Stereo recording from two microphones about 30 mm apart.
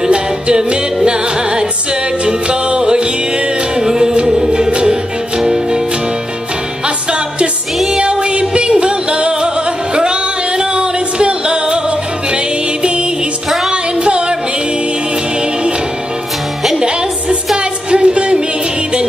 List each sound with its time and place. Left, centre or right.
0.1 s music: right
5.4 s music: right
8.0 s music: right
13.7 s music: right
17.9 s music: right